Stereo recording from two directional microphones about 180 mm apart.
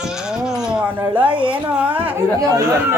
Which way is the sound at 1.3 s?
30° right (ahead or behind).